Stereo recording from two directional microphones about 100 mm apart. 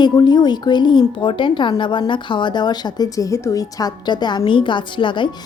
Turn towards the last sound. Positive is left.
turn(degrees=55)  # may be behind; listen again after turning